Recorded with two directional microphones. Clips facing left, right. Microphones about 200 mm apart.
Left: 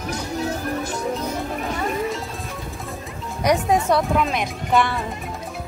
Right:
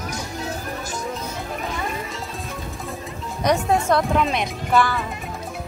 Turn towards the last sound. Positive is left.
turn(degrees=25)  # may be behind; listen again after turning